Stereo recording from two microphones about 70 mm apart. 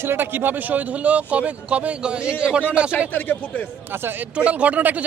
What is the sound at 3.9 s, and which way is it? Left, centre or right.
Speech, right.